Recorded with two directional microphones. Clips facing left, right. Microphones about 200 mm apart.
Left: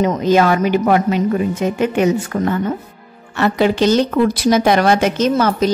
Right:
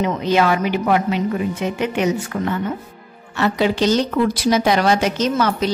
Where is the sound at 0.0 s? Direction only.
45° left (ahead or behind).